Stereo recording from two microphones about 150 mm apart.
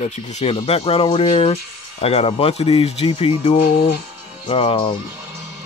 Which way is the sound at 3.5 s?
75° left (ahead or behind).